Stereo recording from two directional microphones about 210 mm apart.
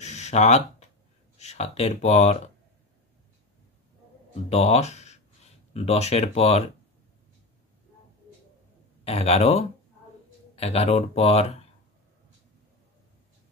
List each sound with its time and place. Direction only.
0.0 s a sound: 35° left (ahead or behind)
1.4 s speech: 30° left (ahead or behind)
4.3 s speech: 30° left (ahead or behind)
9.0 s speech: 30° left (ahead or behind)